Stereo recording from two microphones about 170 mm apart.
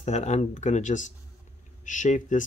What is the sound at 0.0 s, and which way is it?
Speech, 40° left (ahead or behind).